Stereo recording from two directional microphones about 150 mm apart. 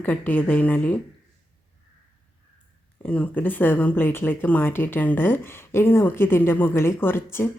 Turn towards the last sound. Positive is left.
turn(degrees=15)  # may be behind; listen again after turning